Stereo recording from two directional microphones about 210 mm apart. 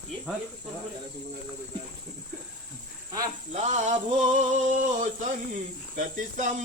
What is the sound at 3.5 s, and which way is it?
Male singing, 35° right (ahead or behind).